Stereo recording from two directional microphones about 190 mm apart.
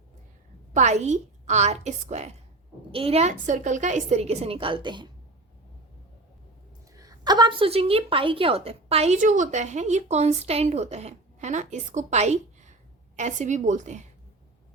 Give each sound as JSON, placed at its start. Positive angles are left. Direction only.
{"t": 0.7, "sound": "a woman's voice", "side_deg": -40}
{"t": 6.9, "sound": "a woman's voice", "side_deg": -20}